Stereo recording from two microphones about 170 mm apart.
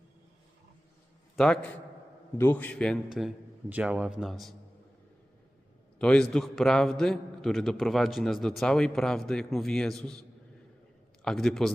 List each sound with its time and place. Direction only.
1.4 s a man's voice: 5° left (ahead or behind)
6.0 s a man's voice: 5° left (ahead or behind)